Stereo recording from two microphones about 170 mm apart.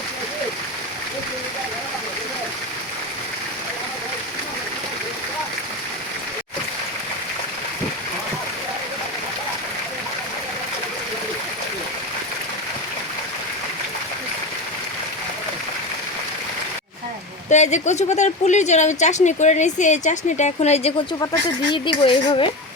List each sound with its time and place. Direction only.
17.5 s a woman's voice: 45° left (ahead or behind)
21.7 s speech: 30° left (ahead or behind)